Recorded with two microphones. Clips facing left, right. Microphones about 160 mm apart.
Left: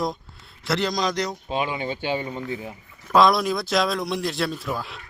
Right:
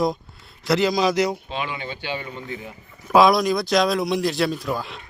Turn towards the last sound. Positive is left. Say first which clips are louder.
# right 3 dB
turn(degrees=0)  # may be behind; listen again after turning